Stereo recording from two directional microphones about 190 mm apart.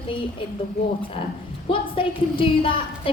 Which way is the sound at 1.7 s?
30° left (ahead or behind).